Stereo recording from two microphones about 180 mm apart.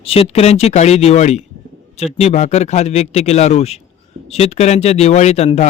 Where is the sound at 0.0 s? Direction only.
30° left (ahead or behind).